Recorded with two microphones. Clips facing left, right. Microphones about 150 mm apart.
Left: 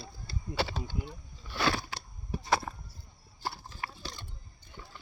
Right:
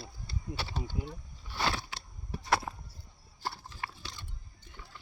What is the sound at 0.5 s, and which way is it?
Speech, 90° left.